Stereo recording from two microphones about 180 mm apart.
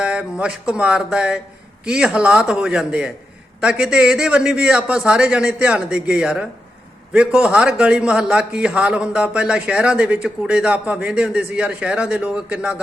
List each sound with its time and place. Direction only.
0.0 s a man's voice: 5° right (ahead or behind)